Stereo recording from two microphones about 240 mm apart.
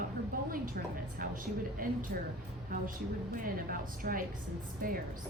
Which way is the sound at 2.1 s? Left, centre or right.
Right.